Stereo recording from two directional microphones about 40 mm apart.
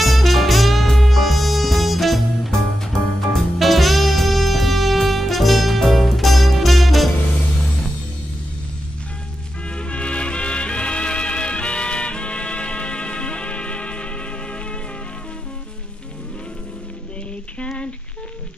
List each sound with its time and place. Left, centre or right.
0.0 s music: centre
9.7 s music: left
17.6 s a sound: left